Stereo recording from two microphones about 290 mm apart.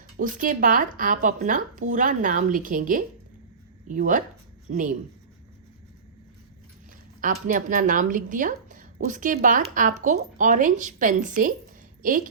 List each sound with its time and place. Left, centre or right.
0.2 s speech: right
7.2 s speech: right